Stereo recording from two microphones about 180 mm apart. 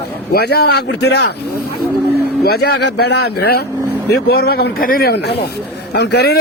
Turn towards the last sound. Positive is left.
turn(degrees=65)  # may be behind; listen again after turning